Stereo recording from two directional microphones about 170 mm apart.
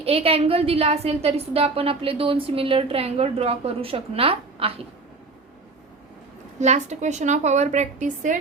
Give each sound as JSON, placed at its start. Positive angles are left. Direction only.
{"t": 0.0, "sound": "a woman's voice", "side_deg": -35}
{"t": 6.6, "sound": "a woman's voice", "side_deg": -45}